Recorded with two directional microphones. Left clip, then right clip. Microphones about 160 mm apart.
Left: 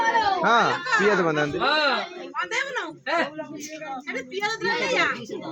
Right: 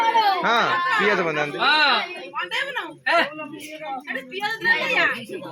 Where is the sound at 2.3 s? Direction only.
15° left (ahead or behind).